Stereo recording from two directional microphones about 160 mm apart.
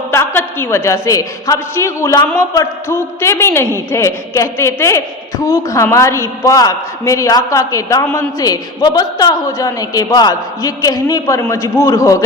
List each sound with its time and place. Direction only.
0.1 s a man's voice: 15° left (ahead or behind)